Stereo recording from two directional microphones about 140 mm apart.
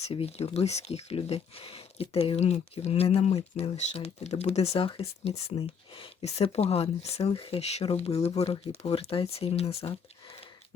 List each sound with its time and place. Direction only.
0.1 s speech: 45° left (ahead or behind)